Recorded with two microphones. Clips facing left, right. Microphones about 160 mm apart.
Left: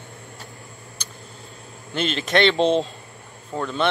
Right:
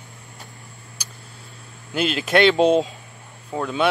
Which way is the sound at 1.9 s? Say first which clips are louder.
Right 2 dB; 5° right (ahead or behind).